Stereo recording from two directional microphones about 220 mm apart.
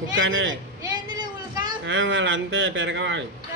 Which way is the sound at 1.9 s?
60° right (ahead or behind).